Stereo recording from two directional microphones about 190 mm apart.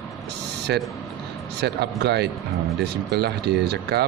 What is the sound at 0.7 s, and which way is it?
Speech, 65° right (ahead or behind).